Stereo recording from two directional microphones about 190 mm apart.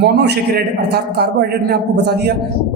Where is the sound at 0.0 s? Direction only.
60° right (ahead or behind).